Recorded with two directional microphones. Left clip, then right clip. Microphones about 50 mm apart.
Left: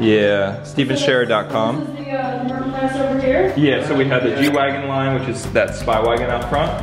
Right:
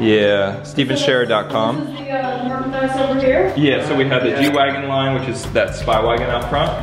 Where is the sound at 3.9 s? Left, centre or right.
Centre.